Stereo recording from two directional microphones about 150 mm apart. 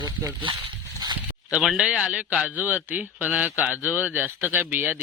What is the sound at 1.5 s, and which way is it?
A man's voice, 5° right (ahead or behind).